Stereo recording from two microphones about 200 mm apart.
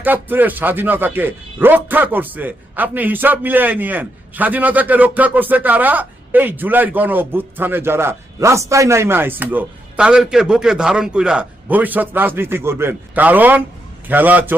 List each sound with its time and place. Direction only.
0.0 s speech: 10° right (ahead or behind)